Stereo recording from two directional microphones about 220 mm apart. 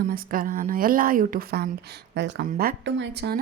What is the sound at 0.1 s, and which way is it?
Speech, 40° right (ahead or behind).